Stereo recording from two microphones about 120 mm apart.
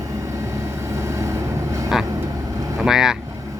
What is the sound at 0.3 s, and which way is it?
Vehicle, 25° right (ahead or behind).